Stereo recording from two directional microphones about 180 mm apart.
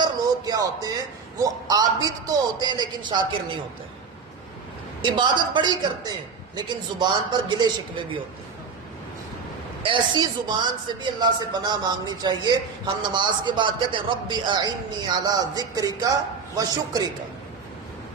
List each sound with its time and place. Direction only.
0.0 s music: 20° right (ahead or behind)
1.4 s a man's voice: 20° right (ahead or behind)
5.0 s a man's voice: 25° right (ahead or behind)
9.8 s a man's voice: 25° right (ahead or behind)